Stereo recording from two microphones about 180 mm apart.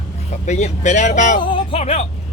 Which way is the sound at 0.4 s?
40° left (ahead or behind).